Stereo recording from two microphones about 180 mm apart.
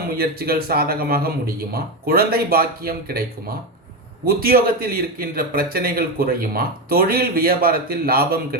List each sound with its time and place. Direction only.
0.2 s a man's voice: 55° right (ahead or behind)
4.3 s a man's voice: 55° right (ahead or behind)